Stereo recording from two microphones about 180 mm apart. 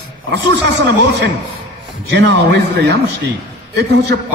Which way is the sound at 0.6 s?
70° right (ahead or behind).